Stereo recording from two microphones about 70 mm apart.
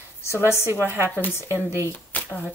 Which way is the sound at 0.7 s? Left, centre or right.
Right.